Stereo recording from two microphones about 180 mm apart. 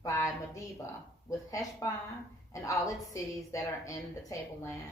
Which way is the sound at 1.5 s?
20° left (ahead or behind).